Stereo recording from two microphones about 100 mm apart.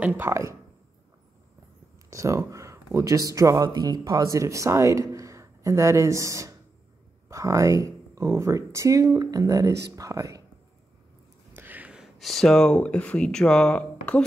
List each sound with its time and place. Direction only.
0.0 s speech: 20° right (ahead or behind)
2.0 s speech: 30° right (ahead or behind)
11.5 s a sound: 15° right (ahead or behind)
12.2 s speech: centre (ahead or behind)